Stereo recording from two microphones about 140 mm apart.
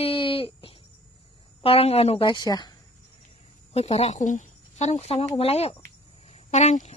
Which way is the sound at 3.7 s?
45° left (ahead or behind).